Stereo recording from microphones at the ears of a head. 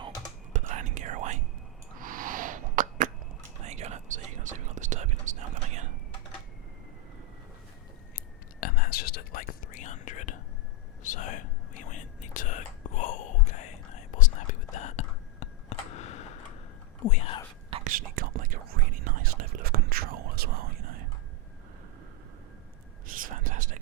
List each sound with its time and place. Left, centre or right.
0.5 s whispering: right
1.9 s a sound: right
3.6 s whispering: right
8.6 s whispering: left
17.7 s whispering: right
23.0 s whispering: right